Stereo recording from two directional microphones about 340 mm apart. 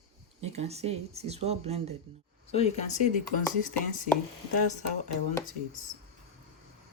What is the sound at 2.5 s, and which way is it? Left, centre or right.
Speech, centre.